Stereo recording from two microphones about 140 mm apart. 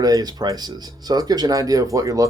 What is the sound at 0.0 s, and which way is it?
Speech, 25° right (ahead or behind).